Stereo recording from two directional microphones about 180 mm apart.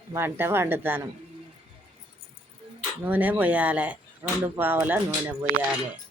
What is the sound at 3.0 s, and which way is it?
Speech, 10° right (ahead or behind).